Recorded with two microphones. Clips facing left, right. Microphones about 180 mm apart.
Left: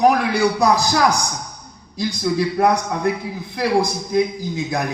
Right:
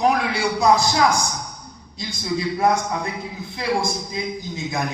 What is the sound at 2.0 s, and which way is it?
A woman's voice, 65° left (ahead or behind).